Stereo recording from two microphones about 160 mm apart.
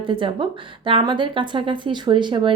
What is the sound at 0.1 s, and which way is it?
A woman's voice, 30° right (ahead or behind).